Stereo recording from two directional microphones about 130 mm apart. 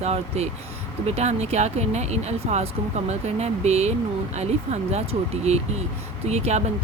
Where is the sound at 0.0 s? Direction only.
55° right (ahead or behind).